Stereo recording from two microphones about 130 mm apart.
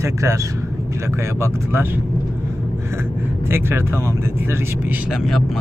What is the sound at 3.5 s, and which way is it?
Speech, 20° right (ahead or behind).